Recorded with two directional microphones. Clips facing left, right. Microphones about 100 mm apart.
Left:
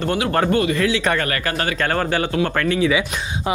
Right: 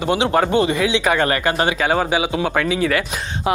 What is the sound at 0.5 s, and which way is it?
Speech, 25° right (ahead or behind).